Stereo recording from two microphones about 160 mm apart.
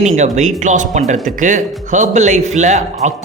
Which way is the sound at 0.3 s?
50° right (ahead or behind).